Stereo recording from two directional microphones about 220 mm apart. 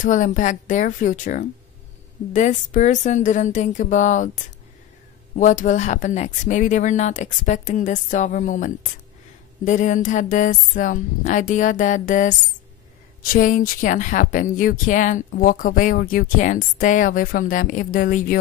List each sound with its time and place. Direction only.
0.0 s a woman's voice: 35° left (ahead or behind)
5.3 s a woman's voice: 35° left (ahead or behind)